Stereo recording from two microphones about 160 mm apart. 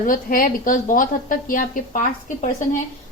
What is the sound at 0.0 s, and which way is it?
A woman's voice, 60° left (ahead or behind).